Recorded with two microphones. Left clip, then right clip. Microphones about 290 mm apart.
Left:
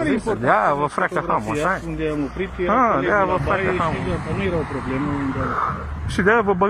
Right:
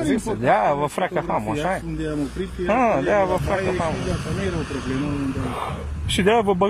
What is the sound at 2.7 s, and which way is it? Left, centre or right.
Speech, right.